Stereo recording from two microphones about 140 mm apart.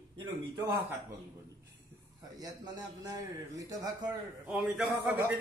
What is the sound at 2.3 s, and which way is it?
A man's voice, 30° right (ahead or behind).